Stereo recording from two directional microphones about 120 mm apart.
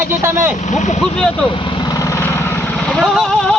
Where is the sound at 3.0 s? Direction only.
Centre (ahead or behind).